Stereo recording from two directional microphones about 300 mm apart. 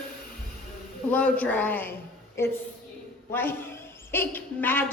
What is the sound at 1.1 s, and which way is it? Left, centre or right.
Speech, centre.